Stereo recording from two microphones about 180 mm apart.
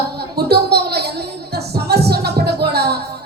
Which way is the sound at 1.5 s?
65° right (ahead or behind).